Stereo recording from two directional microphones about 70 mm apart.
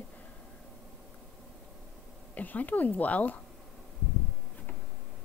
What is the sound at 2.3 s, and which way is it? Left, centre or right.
Speech, left.